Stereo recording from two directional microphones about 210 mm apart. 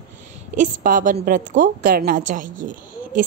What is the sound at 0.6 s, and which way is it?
A woman's voice, 40° right (ahead or behind).